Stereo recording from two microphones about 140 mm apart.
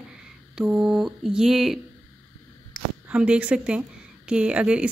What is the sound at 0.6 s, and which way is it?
Mantra, 5° right (ahead or behind).